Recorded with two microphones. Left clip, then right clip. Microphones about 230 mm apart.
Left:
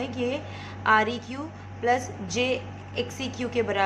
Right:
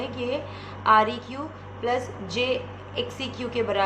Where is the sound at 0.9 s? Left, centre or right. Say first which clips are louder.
Right 3 dB; centre.